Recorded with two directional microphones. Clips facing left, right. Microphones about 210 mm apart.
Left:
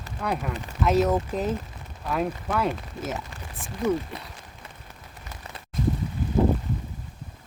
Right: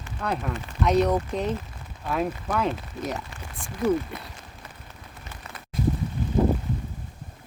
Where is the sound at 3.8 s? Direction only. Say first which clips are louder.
Right 2 dB; 20° left (ahead or behind).